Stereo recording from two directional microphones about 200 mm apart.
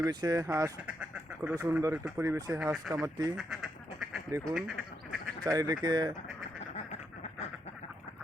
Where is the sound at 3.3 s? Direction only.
Centre (ahead or behind).